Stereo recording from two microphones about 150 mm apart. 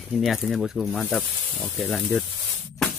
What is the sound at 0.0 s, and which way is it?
Speech, centre (ahead or behind).